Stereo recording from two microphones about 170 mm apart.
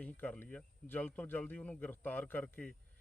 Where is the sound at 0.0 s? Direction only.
10° left (ahead or behind).